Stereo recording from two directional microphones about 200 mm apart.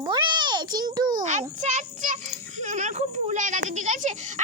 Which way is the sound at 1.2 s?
35° right (ahead or behind).